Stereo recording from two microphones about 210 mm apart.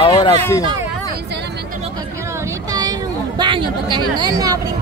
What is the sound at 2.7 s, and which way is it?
Speech, 20° right (ahead or behind).